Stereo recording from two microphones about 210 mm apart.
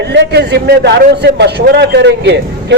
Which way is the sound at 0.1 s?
55° right (ahead or behind).